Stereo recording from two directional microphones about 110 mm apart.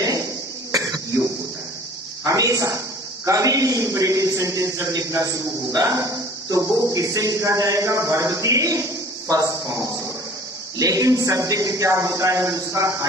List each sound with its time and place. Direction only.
0.7 s cough: 30° right (ahead or behind)
2.2 s a woman's voice: 30° right (ahead or behind)